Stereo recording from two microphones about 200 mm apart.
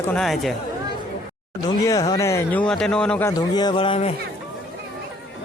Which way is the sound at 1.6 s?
20° left (ahead or behind).